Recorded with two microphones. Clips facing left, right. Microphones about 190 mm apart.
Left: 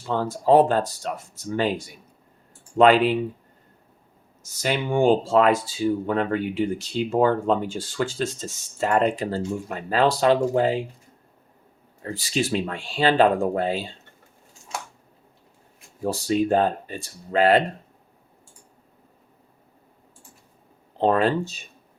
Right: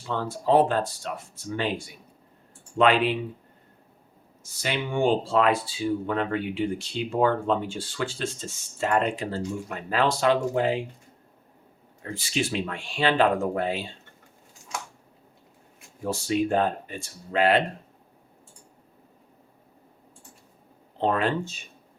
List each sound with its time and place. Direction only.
0.1 s speech: 40° left (ahead or behind)
2.7 s speech: 40° left (ahead or behind)
4.6 s speech: 45° left (ahead or behind)
12.0 s speech: 35° left (ahead or behind)
16.0 s speech: 35° left (ahead or behind)
21.0 s speech: 35° left (ahead or behind)